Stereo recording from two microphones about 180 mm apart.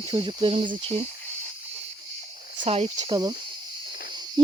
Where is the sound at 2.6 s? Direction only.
35° right (ahead or behind).